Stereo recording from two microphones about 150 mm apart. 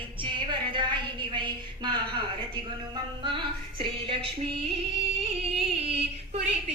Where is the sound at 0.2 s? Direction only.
35° right (ahead or behind).